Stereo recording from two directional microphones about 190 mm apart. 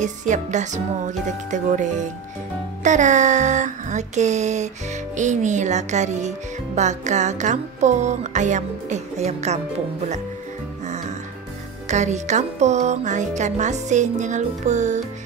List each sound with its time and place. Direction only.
0.0 s music: 40° right (ahead or behind)
11.9 s music: 40° right (ahead or behind)